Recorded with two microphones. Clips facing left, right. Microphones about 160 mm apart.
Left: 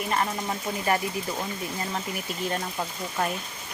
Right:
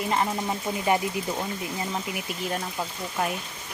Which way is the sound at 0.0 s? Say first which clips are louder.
Right 2 dB; 20° right (ahead or behind).